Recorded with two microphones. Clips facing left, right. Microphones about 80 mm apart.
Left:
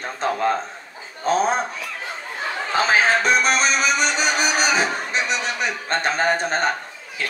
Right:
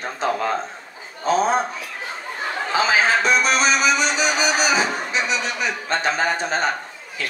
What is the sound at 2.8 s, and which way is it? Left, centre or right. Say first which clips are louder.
Speech: left 1 dB; left.